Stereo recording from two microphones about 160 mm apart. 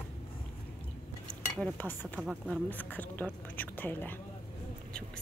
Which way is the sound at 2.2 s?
5° right (ahead or behind).